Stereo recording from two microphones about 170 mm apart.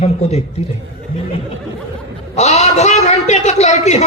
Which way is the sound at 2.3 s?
40° left (ahead or behind).